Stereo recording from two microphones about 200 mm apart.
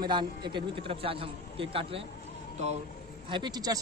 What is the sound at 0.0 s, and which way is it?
A man's voice, 20° right (ahead or behind).